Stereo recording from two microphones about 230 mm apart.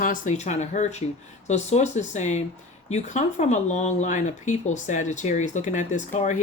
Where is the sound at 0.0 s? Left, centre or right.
Left.